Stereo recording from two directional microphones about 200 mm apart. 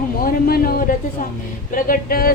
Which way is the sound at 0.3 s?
50° left (ahead or behind).